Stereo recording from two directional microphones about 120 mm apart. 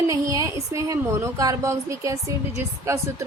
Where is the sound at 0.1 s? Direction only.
25° right (ahead or behind).